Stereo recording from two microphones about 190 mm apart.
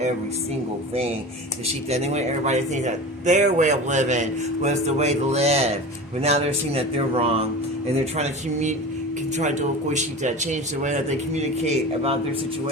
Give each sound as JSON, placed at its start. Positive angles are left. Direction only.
{"t": 1.6, "sound": "speech", "side_deg": -35}